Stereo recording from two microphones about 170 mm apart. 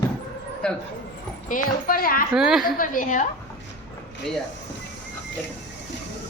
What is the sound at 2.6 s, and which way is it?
Speech, 55° left (ahead or behind).